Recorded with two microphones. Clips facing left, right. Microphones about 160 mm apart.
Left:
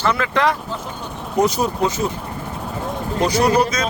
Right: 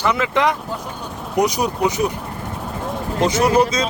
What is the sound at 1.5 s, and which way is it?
Speech, 15° right (ahead or behind).